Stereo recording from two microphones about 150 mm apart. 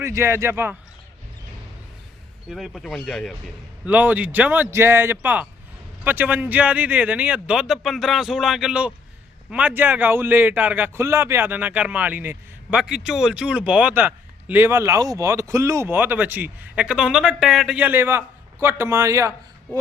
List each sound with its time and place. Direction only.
0.0 s a man's voice: 20° right (ahead or behind)
2.5 s speech: centre (ahead or behind)
3.8 s a man's voice: 10° right (ahead or behind)